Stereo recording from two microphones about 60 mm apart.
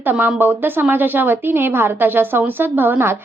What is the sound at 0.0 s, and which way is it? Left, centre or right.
A woman's voice, right.